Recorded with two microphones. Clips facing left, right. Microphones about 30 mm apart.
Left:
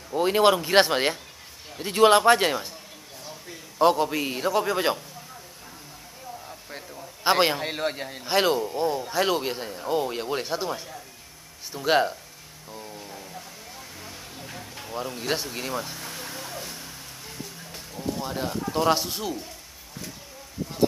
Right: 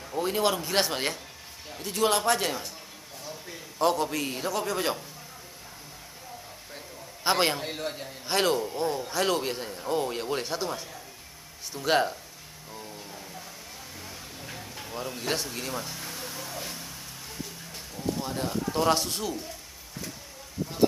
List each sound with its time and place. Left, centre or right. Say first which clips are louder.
0.2 s speech: left 7 dB; left
3.7 s a man's voice: left 5 dB; centre
7.2 s a man's voice: left 4 dB; centre
7.6 s a man's voice: left 5 dB; left
8.3 s a man's voice: left 3 dB; centre
12.7 s a sound: left 3 dB; centre
16.5 s a sound: even; centre
17.7 s speech: left 1 dB; centre